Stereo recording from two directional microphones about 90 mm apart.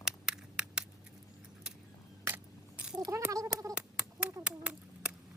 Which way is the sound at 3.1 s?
35° right (ahead or behind).